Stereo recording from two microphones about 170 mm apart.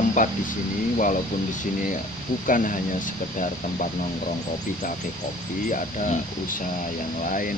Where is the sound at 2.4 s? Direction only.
50° left (ahead or behind).